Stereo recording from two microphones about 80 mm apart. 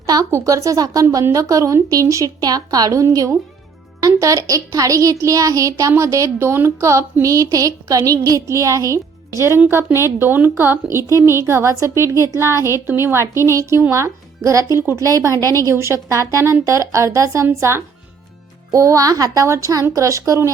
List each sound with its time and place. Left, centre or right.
0.0 s a woman's voice: right
8.4 s a woman's voice: right
18.7 s a woman's voice: right